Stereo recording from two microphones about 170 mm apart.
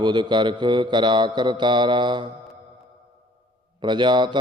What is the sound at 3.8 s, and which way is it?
Mantra, 25° right (ahead or behind).